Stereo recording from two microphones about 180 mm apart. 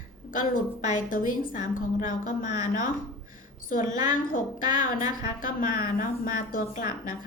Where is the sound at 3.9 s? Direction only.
45° left (ahead or behind).